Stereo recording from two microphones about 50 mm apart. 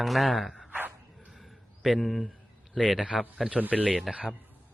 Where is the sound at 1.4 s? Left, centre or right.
Centre.